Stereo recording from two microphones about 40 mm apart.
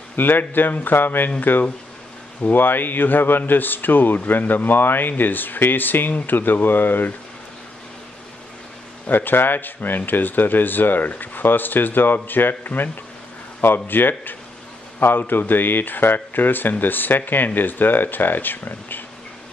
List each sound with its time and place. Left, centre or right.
0.1 s speech: left
9.1 s speech: left